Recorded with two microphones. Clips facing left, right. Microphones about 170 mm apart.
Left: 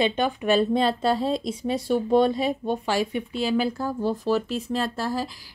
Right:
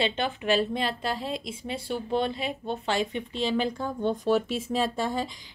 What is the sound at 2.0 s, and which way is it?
Speech, 45° left (ahead or behind).